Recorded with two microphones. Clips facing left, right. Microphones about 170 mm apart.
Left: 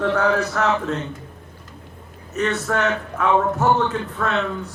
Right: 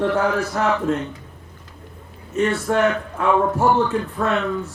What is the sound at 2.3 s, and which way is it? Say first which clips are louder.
Speech: right 3 dB; 25° right (ahead or behind).